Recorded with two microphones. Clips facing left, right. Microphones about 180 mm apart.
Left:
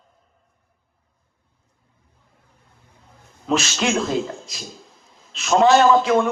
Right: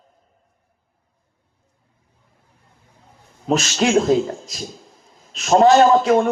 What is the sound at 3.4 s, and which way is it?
A man's voice, 40° right (ahead or behind).